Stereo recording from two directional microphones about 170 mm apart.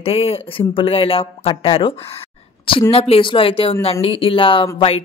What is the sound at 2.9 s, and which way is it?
Speech, 35° left (ahead or behind).